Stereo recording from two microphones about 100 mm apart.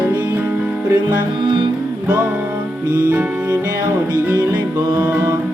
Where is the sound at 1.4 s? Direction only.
55° right (ahead or behind).